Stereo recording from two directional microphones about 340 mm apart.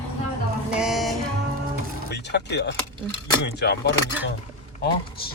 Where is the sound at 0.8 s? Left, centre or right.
Centre.